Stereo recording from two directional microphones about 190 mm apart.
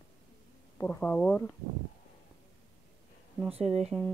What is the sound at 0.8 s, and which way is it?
Speech, 5° left (ahead or behind).